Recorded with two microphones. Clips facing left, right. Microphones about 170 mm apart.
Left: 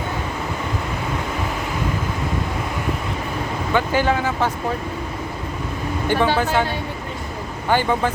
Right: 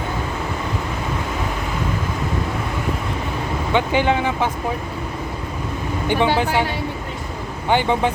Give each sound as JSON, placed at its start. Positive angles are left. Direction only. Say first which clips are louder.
{"t": 3.7, "sound": "speech", "louder": "right 1 dB", "side_deg": -20}
{"t": 6.1, "sound": "speech", "louder": "even", "side_deg": -15}
{"t": 7.7, "sound": "speech", "louder": "right 1 dB", "side_deg": -20}